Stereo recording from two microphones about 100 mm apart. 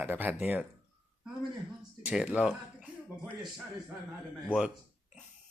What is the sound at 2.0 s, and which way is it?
Speech, 15° right (ahead or behind).